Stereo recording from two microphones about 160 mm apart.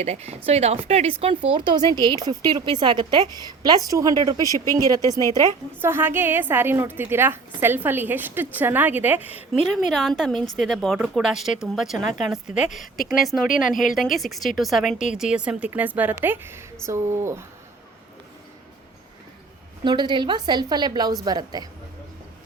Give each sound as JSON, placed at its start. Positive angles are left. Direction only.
{"t": 0.0, "sound": "speech", "side_deg": -40}
{"t": 4.4, "sound": "speech", "side_deg": 20}
{"t": 5.4, "sound": "a woman's voice", "side_deg": -15}
{"t": 9.9, "sound": "speech", "side_deg": 0}
{"t": 13.5, "sound": "speech", "side_deg": 55}
{"t": 13.9, "sound": "a woman's voice", "side_deg": 0}
{"t": 19.8, "sound": "speech", "side_deg": -30}